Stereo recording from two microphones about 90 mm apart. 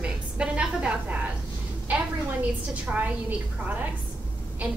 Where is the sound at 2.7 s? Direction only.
15° right (ahead or behind).